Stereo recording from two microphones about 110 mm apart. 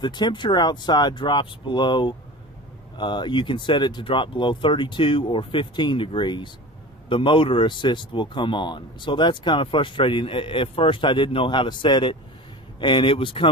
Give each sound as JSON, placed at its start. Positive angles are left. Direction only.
{"t": 0.0, "sound": "speech", "side_deg": 45}